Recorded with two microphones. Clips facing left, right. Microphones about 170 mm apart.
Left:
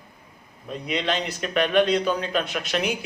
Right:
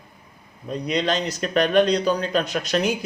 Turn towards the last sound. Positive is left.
turn(degrees=-40)  # may be behind; listen again after turning